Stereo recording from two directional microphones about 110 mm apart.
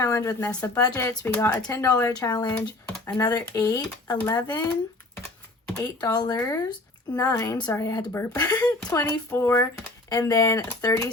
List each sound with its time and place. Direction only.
0.0 s speech: 30° left (ahead or behind)
1.2 s speech: 15° left (ahead or behind)
1.7 s a woman's voice: 30° left (ahead or behind)
5.7 s a woman's voice: 35° left (ahead or behind)